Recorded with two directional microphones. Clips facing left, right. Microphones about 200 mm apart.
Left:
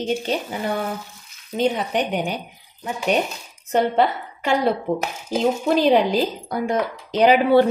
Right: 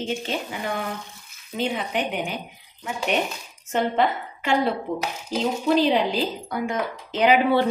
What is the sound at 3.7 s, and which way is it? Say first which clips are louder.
Speech: left 3 dB; 40° left (ahead or behind).